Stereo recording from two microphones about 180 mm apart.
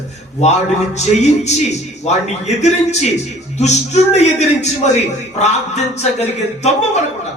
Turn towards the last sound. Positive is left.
turn(degrees=40)  # may be behind; listen again after turning